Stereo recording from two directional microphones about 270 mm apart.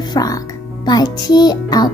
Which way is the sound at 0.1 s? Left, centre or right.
Centre.